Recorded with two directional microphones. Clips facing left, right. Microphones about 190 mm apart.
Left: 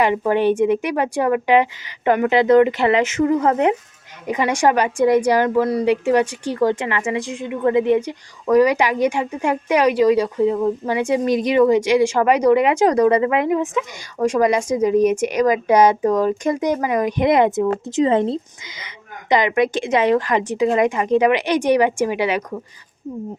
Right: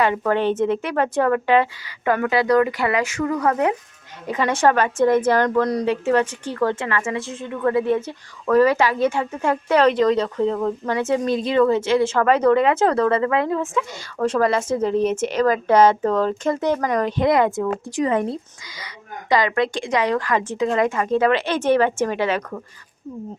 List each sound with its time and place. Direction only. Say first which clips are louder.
0.0 s a woman's voice: left 2 dB; 15° left (ahead or behind)